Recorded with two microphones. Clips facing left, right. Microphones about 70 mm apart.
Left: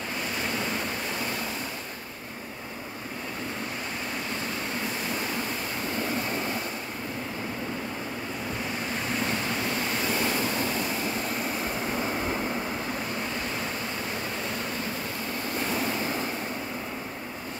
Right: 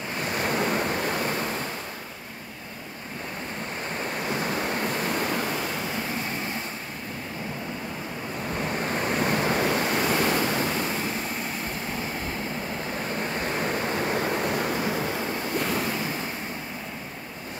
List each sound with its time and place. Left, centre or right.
0.5 s waves: right
8.6 s waves: right
9.7 s waves: right
9.9 s waves: right
10.5 s waves: right
13.4 s waves: right
14.4 s waves: right